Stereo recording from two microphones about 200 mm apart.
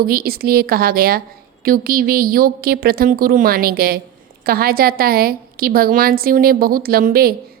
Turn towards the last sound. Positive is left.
turn(degrees=-50)  # may be behind; listen again after turning